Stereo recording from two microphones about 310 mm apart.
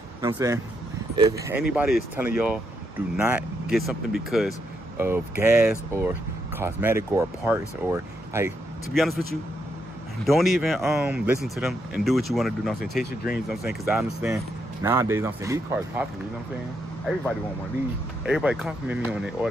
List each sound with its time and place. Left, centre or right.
0.2 s speech: centre
10.2 s speech: centre
13.0 s speech: left
13.5 s speech: centre
18.2 s speech: centre